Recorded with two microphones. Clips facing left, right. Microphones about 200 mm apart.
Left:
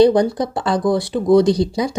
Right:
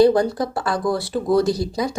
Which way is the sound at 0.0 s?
20° left (ahead or behind).